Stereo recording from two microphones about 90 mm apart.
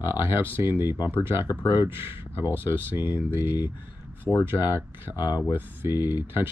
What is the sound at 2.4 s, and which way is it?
Speech, 25° right (ahead or behind).